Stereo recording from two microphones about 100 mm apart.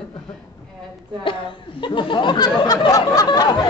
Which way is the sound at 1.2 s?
60° left (ahead or behind).